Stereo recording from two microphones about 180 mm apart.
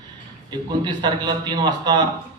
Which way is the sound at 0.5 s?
25° right (ahead or behind).